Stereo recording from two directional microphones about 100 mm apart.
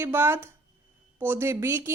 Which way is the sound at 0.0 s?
25° right (ahead or behind).